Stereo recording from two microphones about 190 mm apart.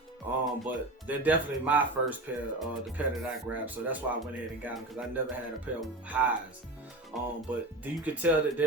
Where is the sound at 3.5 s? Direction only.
10° right (ahead or behind).